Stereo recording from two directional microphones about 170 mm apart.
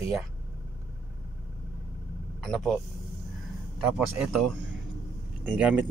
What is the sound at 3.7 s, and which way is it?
Speech, 5° right (ahead or behind).